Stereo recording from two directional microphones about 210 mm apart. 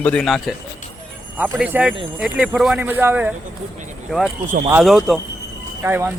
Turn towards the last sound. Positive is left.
turn(degrees=-10)  # may be behind; listen again after turning